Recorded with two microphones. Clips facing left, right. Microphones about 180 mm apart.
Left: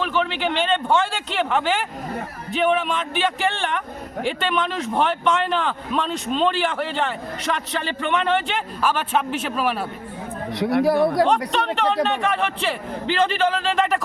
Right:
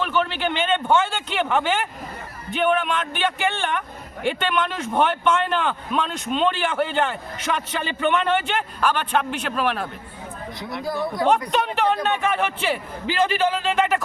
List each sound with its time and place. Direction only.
0.0 s a man's voice: centre (ahead or behind)
10.5 s speech: 65° left (ahead or behind)
11.5 s a man's voice: 5° right (ahead or behind)